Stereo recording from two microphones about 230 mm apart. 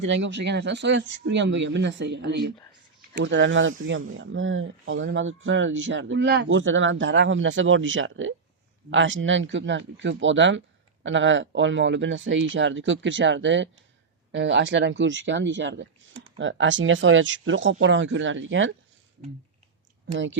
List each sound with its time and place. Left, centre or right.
0.0 s speech: right